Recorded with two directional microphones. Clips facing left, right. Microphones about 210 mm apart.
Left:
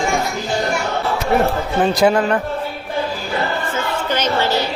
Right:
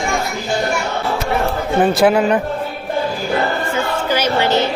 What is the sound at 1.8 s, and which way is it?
Speech, 5° right (ahead or behind).